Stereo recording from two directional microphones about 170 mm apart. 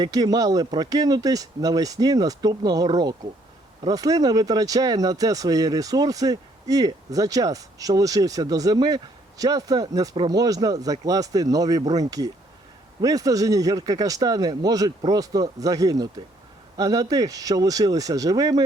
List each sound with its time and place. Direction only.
0.0 s speech: 25° right (ahead or behind)